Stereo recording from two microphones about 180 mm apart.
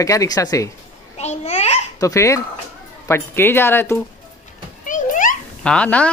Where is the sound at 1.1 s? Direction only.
35° left (ahead or behind).